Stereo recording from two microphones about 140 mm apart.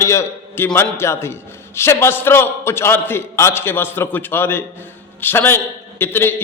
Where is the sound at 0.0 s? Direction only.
20° left (ahead or behind).